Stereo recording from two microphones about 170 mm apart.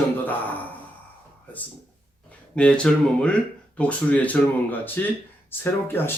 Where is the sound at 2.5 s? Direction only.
5° left (ahead or behind).